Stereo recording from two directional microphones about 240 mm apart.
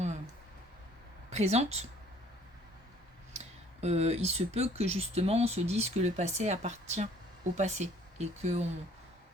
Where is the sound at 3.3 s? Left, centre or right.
Right.